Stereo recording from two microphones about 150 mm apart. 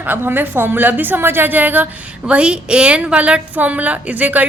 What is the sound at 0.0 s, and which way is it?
A woman's voice, 15° right (ahead or behind).